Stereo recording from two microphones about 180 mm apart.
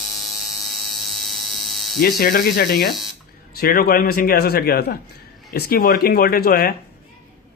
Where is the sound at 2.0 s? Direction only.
55° left (ahead or behind).